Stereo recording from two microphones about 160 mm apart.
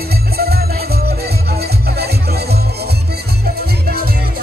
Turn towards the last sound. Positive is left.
turn(degrees=-85)